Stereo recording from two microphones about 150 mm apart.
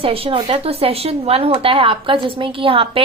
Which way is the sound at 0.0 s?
35° right (ahead or behind).